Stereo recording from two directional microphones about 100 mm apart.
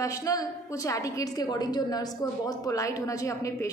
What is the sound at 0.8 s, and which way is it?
A woman's voice, 35° left (ahead or behind).